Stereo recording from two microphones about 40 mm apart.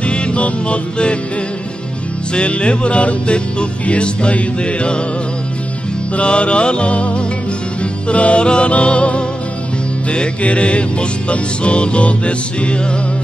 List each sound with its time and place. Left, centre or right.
0.0 s music: left
2.3 s music: left
6.1 s music: left